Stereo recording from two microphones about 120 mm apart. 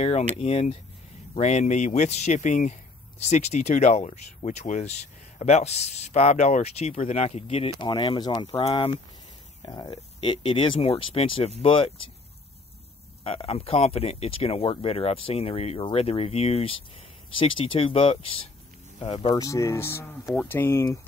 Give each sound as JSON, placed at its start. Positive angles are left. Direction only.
{"t": 0.4, "sound": "speech", "side_deg": 60}
{"t": 1.4, "sound": "speech", "side_deg": 75}
{"t": 7.8, "sound": "speech", "side_deg": 40}
{"t": 8.6, "sound": "speech", "side_deg": 50}
{"t": 9.6, "sound": "speech", "side_deg": 40}
{"t": 13.2, "sound": "speech", "side_deg": 55}
{"t": 18.9, "sound": "speech", "side_deg": 45}
{"t": 19.4, "sound": "speech", "side_deg": 25}